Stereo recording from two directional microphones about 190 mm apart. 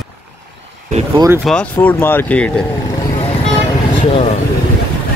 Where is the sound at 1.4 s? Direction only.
5° left (ahead or behind).